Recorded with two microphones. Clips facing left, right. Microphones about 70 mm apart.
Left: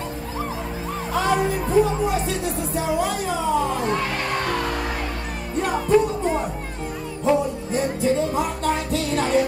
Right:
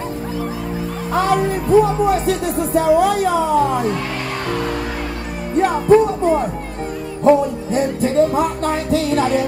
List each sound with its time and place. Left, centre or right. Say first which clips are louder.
1.1 s music: right 4 dB; right
5.6 s music: right 9 dB; right
7.2 s music: right 7 dB; right